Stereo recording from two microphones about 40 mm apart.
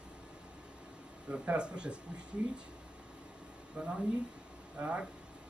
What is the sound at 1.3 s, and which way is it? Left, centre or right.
Speech, right.